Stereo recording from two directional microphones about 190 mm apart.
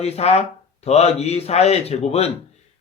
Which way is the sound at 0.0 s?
35° left (ahead or behind).